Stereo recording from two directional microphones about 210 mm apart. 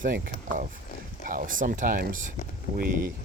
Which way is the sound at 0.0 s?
40° right (ahead or behind).